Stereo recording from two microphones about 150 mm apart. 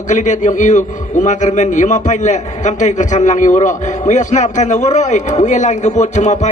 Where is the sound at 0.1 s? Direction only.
55° left (ahead or behind).